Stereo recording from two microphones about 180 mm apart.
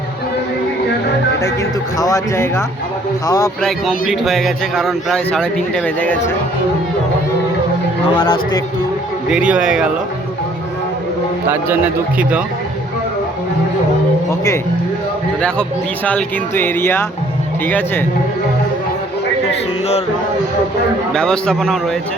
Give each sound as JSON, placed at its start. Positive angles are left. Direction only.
{"t": 2.0, "sound": "a man's voice", "side_deg": 20}
{"t": 3.6, "sound": "speech", "side_deg": 0}
{"t": 8.1, "sound": "a man's voice", "side_deg": 25}
{"t": 9.3, "sound": "speech", "side_deg": -5}
{"t": 14.3, "sound": "speech", "side_deg": 15}
{"t": 15.4, "sound": "speech", "side_deg": 5}
{"t": 21.1, "sound": "speech", "side_deg": 5}